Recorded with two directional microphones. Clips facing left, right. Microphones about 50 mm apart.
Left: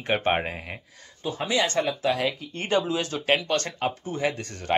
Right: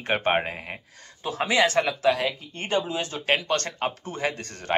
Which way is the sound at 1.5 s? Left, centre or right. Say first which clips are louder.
Right 3 dB; right.